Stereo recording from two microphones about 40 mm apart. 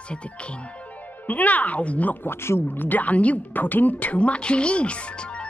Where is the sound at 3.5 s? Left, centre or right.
Left.